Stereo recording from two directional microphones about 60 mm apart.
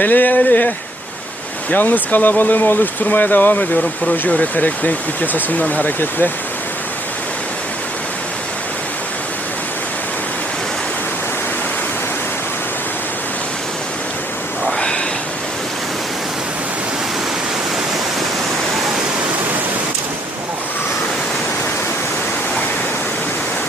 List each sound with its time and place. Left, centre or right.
0.0 s speech: left
1.7 s speech: left